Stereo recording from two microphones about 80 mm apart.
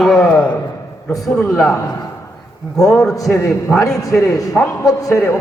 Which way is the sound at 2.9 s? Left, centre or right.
Centre.